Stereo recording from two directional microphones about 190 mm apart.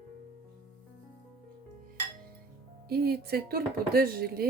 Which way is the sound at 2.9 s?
55° right (ahead or behind).